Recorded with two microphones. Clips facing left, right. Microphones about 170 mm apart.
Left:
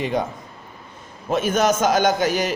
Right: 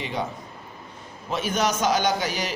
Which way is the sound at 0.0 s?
50° left (ahead or behind).